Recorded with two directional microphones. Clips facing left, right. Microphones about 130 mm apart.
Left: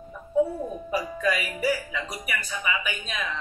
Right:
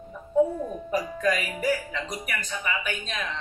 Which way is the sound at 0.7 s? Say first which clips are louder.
Right 1 dB; 5° left (ahead or behind).